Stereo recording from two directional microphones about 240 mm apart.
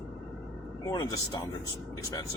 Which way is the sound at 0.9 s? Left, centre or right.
Centre.